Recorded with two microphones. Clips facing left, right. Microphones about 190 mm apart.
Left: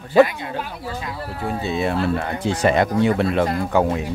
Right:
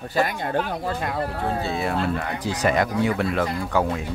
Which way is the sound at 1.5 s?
20° left (ahead or behind).